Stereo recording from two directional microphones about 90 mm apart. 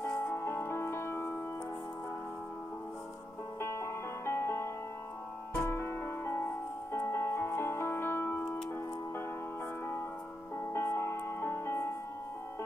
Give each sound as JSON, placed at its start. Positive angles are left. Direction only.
{"t": 0.0, "sound": "music", "side_deg": 20}
{"t": 3.6, "sound": "music", "side_deg": 30}
{"t": 5.7, "sound": "music", "side_deg": 25}
{"t": 10.7, "sound": "music", "side_deg": 30}